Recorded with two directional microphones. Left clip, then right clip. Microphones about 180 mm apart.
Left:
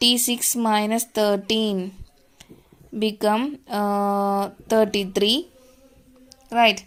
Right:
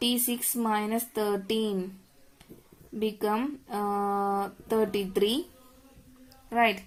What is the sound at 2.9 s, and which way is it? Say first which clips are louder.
Speech: left 7 dB; 40° left (ahead or behind).